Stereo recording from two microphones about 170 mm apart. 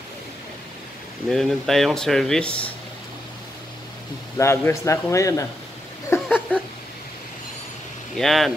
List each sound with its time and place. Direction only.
1.3 s speech: centre (ahead or behind)
4.4 s a man's voice: 15° left (ahead or behind)
6.2 s a sound: centre (ahead or behind)
8.2 s speech: centre (ahead or behind)